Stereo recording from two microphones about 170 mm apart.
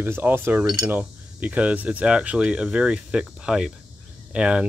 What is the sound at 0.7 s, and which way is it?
Cutlery, 20° right (ahead or behind).